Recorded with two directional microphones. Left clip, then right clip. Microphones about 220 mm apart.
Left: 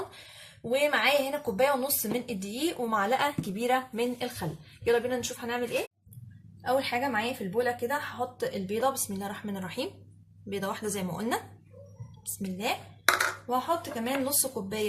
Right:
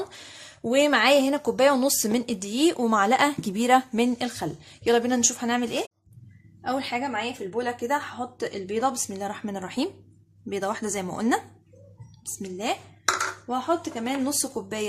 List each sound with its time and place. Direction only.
0.7 s a woman's voice: 45° right (ahead or behind)